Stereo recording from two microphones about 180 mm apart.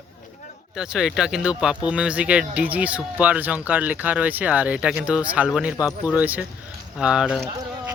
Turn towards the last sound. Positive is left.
turn(degrees=-5)  # may be behind; listen again after turning